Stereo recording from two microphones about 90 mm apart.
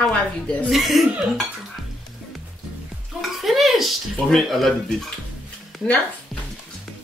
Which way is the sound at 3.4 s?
Centre (ahead or behind).